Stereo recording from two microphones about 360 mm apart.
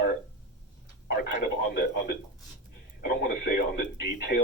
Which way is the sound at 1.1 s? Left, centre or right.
Left.